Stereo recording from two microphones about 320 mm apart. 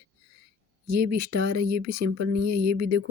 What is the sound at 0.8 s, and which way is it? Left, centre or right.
Speech, right.